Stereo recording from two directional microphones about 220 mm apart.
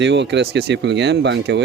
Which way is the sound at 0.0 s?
50° right (ahead or behind).